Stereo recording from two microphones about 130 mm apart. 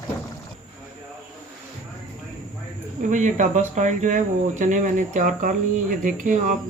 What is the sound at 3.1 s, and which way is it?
Speech, 70° right (ahead or behind).